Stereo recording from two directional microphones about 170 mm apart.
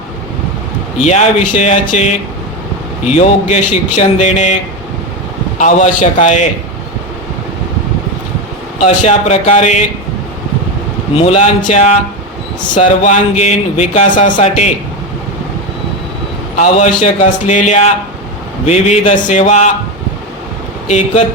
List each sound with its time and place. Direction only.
0.9 s speech: 40° left (ahead or behind)
5.5 s speech: 45° left (ahead or behind)
8.8 s speech: 40° left (ahead or behind)
11.1 s speech: 40° left (ahead or behind)
16.6 s speech: 45° left (ahead or behind)
20.8 s speech: 40° left (ahead or behind)